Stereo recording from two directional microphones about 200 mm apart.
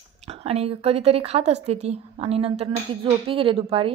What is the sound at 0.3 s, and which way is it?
A woman's voice, 30° right (ahead or behind).